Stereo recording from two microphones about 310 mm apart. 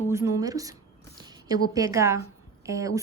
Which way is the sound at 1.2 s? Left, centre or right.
Centre.